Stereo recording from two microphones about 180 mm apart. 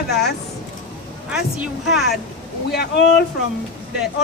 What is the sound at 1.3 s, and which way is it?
Speech, 5° right (ahead or behind).